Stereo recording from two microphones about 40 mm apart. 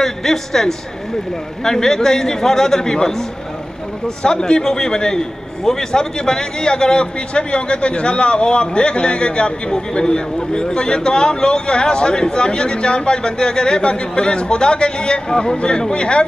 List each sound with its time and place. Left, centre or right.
0.0 s a man's voice: centre; by 16.3 s left